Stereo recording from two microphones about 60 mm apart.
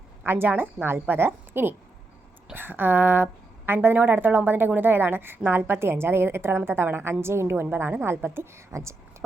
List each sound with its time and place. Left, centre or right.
0.3 s a woman's voice: right